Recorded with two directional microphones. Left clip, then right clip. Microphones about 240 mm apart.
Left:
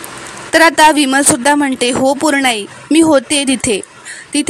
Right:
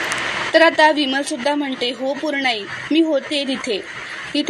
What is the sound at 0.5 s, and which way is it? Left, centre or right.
A woman's voice, left.